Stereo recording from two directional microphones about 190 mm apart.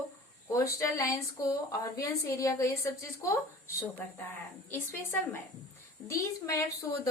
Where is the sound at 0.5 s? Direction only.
15° left (ahead or behind).